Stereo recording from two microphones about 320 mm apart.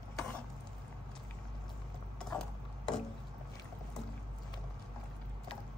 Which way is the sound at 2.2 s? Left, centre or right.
Centre.